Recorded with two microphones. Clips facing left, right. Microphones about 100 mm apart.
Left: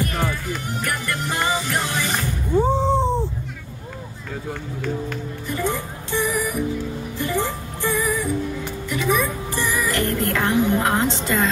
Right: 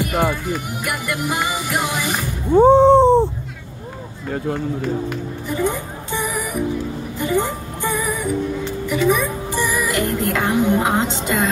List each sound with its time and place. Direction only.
0.3 s speech: 15° right (ahead or behind)
2.5 s a sound: 60° right (ahead or behind)
5.6 s speech: 20° right (ahead or behind)
7.2 s music: 20° right (ahead or behind)